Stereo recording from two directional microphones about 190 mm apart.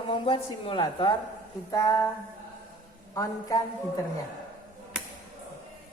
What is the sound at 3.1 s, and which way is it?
Speech, 15° left (ahead or behind).